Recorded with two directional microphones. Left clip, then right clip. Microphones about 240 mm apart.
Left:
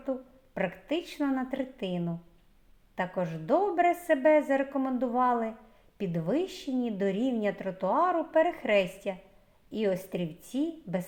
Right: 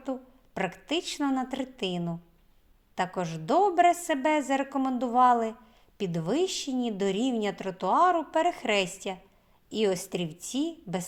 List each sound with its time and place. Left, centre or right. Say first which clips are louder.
0.0 s a woman's voice: left 1 dB; right